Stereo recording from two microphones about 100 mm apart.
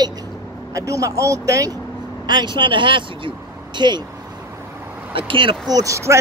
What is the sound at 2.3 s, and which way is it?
Speech, 50° right (ahead or behind).